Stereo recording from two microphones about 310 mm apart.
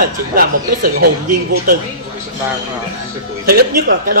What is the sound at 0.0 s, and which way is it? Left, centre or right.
Speech, right.